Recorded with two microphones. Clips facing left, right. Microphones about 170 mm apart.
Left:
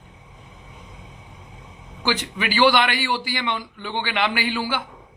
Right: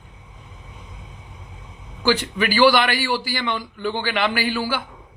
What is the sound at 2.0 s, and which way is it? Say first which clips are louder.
Speech: right 5 dB; 20° left (ahead or behind).